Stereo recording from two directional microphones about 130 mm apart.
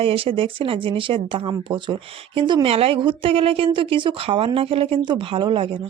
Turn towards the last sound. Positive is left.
turn(degrees=-40)  # may be behind; listen again after turning